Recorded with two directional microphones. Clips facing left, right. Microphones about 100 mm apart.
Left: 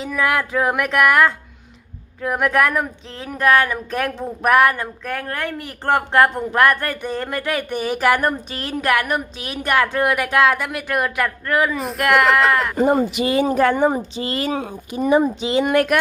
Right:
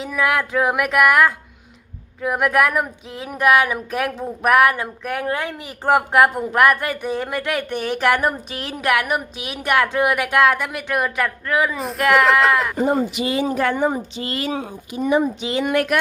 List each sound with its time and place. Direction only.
0.0 s speech: centre (ahead or behind)
12.8 s speech: 60° left (ahead or behind); by 15.7 s 30° left (ahead or behind)
15.7 s speech: 45° left (ahead or behind)